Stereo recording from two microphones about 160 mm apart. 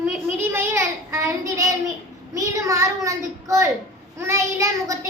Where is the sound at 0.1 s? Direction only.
15° right (ahead or behind).